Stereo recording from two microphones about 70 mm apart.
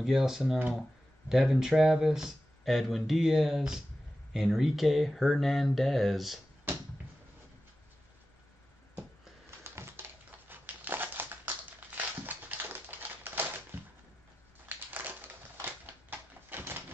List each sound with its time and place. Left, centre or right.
0.0 s speech: centre
9.6 s typing: right
10.5 s crushing: right
14.9 s crushing: right
15.6 s typewriter: right